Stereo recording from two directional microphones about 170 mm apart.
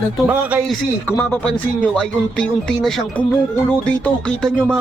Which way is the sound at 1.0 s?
10° left (ahead or behind).